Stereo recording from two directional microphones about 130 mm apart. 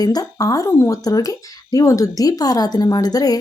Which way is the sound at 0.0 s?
30° left (ahead or behind).